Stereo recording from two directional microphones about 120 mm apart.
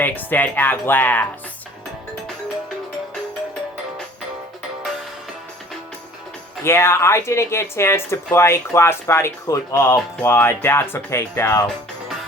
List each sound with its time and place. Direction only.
0.0 s speech: 15° left (ahead or behind)
6.7 s speech: 20° left (ahead or behind)